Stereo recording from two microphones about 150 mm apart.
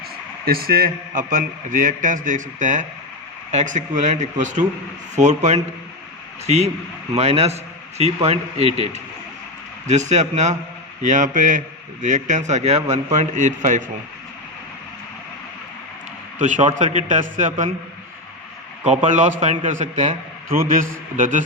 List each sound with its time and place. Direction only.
0.4 s a man's voice: 85° right; by 13.9 s 55° right (ahead or behind)
16.4 s a man's voice: 55° right (ahead or behind)
18.9 s a man's voice: 50° right (ahead or behind)
20.6 s a man's voice: 65° right (ahead or behind)